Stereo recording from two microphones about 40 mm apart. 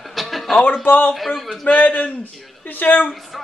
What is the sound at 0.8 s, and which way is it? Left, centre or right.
Speech, left.